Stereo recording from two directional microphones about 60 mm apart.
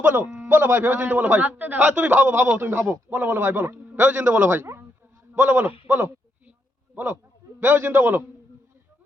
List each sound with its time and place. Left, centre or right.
0.4 s a man's voice: right
3.1 s a man's voice: right
4.0 s a man's voice: right